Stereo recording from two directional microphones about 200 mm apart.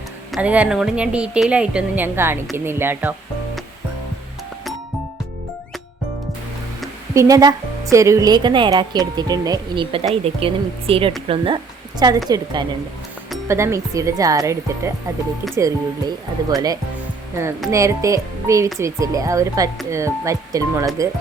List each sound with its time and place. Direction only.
0.3 s a woman's voice: 5° right (ahead or behind)
7.1 s a woman's voice: 15° right (ahead or behind)